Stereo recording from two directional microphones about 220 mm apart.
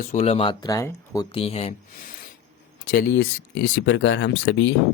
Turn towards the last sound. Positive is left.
turn(degrees=55)  # may be behind; listen again after turning